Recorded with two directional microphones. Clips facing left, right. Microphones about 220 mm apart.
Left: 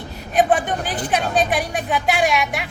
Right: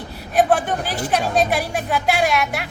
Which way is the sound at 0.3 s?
Centre (ahead or behind).